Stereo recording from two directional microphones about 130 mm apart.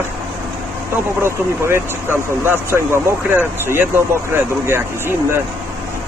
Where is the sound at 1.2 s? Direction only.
20° right (ahead or behind).